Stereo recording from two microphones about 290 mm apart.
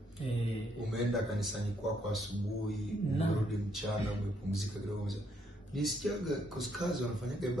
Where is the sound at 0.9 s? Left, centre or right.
Centre.